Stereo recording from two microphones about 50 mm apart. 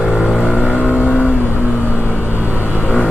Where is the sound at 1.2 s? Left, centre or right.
Right.